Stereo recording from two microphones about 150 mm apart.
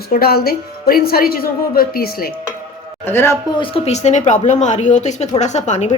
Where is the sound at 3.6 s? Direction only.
45° left (ahead or behind).